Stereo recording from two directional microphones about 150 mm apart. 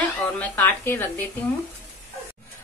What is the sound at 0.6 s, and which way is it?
Speech, 15° left (ahead or behind).